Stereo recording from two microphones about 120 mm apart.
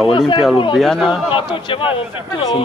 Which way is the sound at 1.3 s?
45° left (ahead or behind).